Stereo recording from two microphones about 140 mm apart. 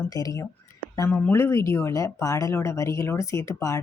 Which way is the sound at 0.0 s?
25° left (ahead or behind).